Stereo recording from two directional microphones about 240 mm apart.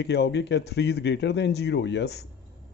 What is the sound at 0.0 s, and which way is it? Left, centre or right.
A man's voice, left.